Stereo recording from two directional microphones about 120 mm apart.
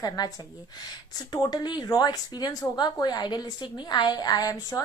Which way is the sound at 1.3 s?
35° left (ahead or behind).